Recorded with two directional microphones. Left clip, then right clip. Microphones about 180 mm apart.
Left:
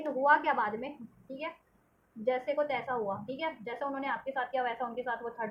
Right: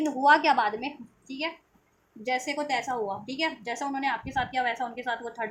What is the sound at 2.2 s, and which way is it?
A woman's voice, 40° right (ahead or behind).